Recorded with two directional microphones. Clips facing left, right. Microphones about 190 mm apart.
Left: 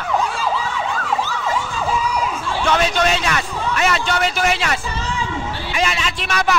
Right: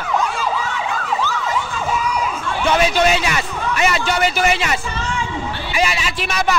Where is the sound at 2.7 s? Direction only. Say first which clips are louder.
Right 2 dB; 5° right (ahead or behind).